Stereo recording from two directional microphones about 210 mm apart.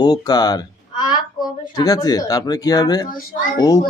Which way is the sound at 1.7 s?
20° left (ahead or behind).